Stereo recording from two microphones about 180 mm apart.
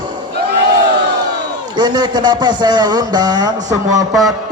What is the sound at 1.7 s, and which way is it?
Speech, 25° right (ahead or behind).